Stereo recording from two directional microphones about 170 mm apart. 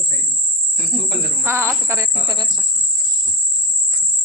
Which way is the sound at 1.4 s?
15° right (ahead or behind).